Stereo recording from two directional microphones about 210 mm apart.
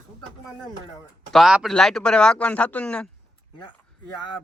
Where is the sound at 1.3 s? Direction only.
Centre (ahead or behind).